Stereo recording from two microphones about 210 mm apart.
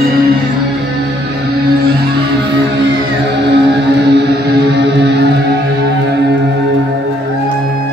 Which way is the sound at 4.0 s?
50° right (ahead or behind).